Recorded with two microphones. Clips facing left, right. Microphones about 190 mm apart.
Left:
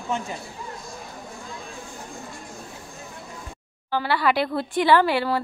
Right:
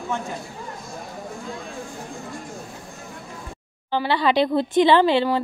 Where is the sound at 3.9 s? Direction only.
20° right (ahead or behind).